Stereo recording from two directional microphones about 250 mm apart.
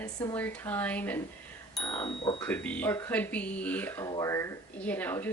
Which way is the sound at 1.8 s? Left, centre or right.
Centre.